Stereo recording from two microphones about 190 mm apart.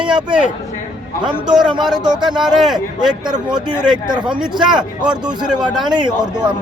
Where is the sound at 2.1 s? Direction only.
25° right (ahead or behind).